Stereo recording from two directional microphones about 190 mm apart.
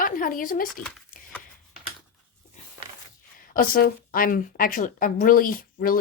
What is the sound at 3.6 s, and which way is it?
Speech, 50° left (ahead or behind).